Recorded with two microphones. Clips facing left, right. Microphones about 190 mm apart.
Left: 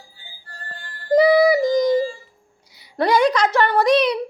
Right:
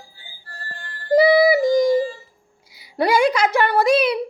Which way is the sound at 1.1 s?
5° right (ahead or behind).